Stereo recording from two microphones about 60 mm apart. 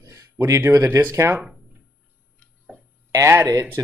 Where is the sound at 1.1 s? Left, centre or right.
Right.